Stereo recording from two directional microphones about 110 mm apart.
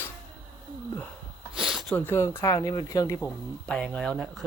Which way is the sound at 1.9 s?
20° left (ahead or behind).